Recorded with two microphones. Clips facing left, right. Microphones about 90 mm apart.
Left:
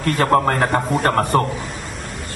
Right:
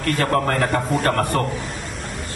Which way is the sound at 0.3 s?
30° left (ahead or behind).